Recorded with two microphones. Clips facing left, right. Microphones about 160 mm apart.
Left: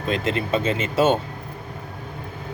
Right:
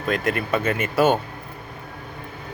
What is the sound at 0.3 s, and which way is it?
Speech, 25° left (ahead or behind).